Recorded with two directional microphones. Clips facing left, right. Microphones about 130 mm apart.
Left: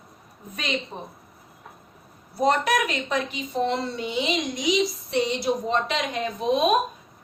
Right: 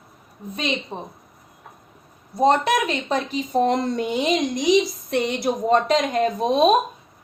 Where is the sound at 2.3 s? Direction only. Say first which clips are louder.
Right 4 dB; 25° right (ahead or behind).